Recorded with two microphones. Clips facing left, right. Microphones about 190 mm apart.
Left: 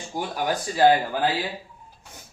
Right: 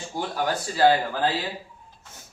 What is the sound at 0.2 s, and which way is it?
Speech, 15° left (ahead or behind).